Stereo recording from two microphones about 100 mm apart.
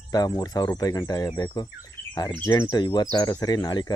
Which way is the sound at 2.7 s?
45° left (ahead or behind).